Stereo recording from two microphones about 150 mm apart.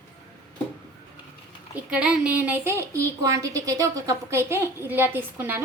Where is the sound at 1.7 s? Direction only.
10° right (ahead or behind).